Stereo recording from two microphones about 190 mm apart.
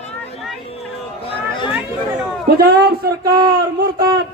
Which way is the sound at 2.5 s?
50° right (ahead or behind).